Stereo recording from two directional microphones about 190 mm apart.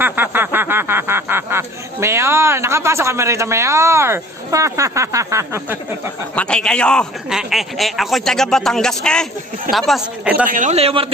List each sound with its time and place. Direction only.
0.0 s speech: 10° right (ahead or behind)
6.3 s a man's voice: 5° left (ahead or behind)
10.5 s a man's voice: 40° right (ahead or behind)